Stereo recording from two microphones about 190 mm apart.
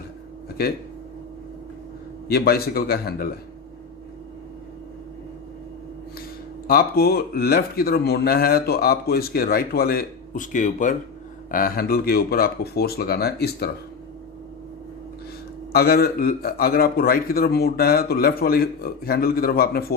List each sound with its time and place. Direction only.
0.6 s speech: 55° left (ahead or behind)
2.2 s speech: 55° left (ahead or behind)
6.7 s speech: 50° left (ahead or behind)
15.7 s speech: 55° left (ahead or behind)